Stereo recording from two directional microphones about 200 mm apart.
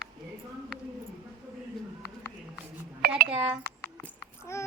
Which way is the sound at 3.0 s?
50° right (ahead or behind).